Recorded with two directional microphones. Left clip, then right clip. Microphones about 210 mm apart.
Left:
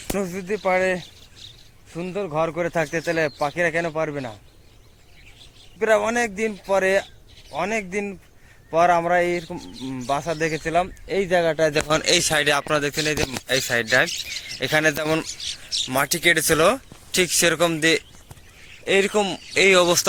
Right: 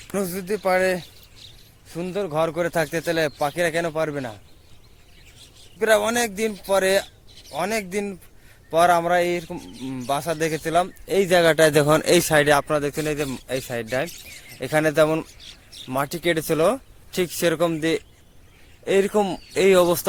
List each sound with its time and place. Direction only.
0.2 s a man's voice: 15° right (ahead or behind)
1.0 s a sound: 25° left (ahead or behind)
1.9 s a man's voice: 15° right (ahead or behind)
5.8 s a man's voice: 10° right (ahead or behind)
9.6 s speech: 10° left (ahead or behind)
10.1 s a man's voice: 10° right (ahead or behind)
11.1 s speech: 40° right (ahead or behind)
12.5 s a man's voice: 10° right (ahead or behind)
18.9 s speech: 25° right (ahead or behind)